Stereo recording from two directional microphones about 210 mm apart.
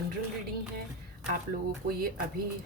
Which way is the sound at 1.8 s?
45° right (ahead or behind).